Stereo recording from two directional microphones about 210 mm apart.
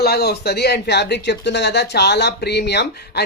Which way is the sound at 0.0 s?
50° left (ahead or behind).